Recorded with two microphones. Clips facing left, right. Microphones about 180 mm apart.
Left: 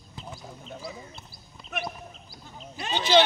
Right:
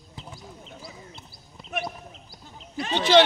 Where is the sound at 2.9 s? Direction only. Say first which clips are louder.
Right 3 dB; 75° right (ahead or behind).